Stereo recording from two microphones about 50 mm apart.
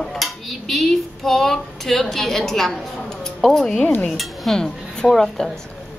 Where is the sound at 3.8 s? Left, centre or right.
Left.